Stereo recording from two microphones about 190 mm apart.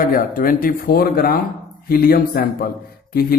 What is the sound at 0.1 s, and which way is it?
A man's voice, 45° left (ahead or behind).